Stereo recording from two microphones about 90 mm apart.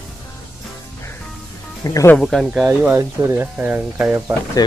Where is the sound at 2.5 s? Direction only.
15° right (ahead or behind).